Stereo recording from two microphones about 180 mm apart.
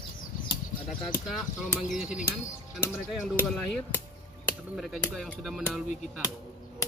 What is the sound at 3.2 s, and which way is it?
Speech, 10° left (ahead or behind).